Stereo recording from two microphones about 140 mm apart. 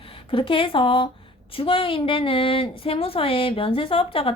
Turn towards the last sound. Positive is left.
turn(degrees=40)  # may be behind; listen again after turning